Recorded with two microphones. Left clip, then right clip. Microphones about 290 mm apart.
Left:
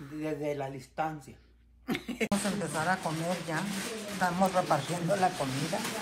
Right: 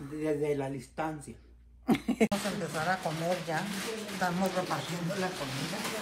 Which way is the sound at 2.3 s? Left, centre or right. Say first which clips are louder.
Left 1 dB; centre.